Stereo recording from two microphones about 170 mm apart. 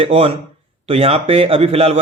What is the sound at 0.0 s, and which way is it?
Speech, 35° right (ahead or behind).